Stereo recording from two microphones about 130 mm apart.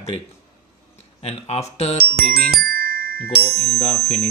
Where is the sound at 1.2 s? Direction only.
50° left (ahead or behind).